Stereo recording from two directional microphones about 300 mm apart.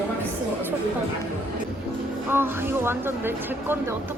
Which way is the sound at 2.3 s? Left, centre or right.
Centre.